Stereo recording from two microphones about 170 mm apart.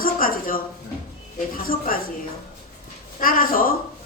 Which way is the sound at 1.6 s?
55° left (ahead or behind).